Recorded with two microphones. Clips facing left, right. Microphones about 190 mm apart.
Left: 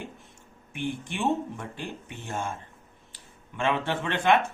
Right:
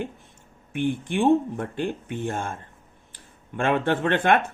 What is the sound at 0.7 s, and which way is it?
Speech, 55° right (ahead or behind).